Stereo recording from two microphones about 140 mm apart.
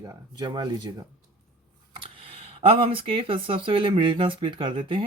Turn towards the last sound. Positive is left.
turn(degrees=-35)  # may be behind; listen again after turning